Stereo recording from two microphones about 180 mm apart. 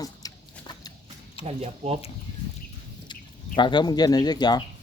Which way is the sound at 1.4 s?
35° right (ahead or behind).